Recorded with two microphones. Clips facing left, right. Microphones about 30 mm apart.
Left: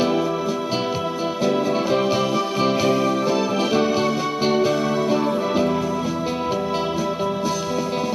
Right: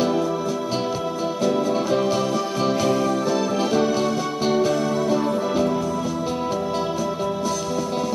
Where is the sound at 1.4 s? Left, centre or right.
Left.